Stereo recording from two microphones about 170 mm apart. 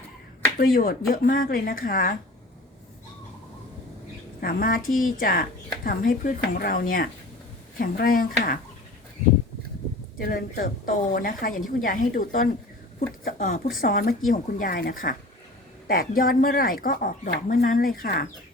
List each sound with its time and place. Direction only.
0.6 s a woman's voice: 60° left (ahead or behind)
4.4 s a woman's voice: 60° left (ahead or behind)
10.2 s a woman's voice: 60° left (ahead or behind)